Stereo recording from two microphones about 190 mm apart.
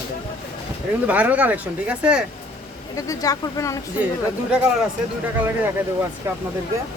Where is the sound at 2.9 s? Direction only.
15° left (ahead or behind).